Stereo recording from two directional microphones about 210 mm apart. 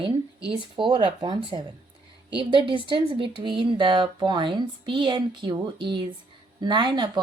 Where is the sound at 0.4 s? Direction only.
25° right (ahead or behind).